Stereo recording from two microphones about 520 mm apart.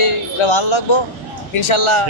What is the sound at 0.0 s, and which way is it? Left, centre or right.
A man's voice, left.